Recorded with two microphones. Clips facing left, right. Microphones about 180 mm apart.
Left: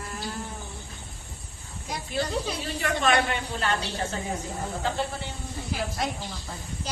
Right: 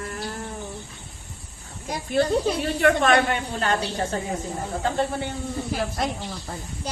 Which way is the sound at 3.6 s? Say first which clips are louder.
Right 4 dB; 45° right (ahead or behind).